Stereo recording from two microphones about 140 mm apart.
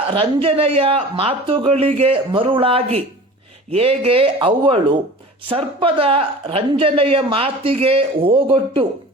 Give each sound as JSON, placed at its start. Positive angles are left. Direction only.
{"t": 0.1, "sound": "speech", "side_deg": -40}